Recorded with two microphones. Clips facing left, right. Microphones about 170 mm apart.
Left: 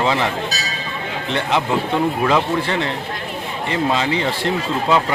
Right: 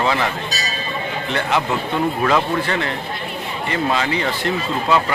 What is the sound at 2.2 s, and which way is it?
Speech, 15° left (ahead or behind).